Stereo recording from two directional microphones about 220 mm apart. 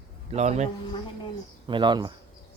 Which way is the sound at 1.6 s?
20° right (ahead or behind).